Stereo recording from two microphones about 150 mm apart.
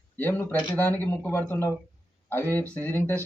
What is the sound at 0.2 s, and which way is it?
A man's voice, 15° left (ahead or behind).